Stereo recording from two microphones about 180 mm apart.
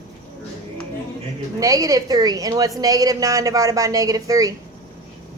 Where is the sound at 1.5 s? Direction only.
20° right (ahead or behind).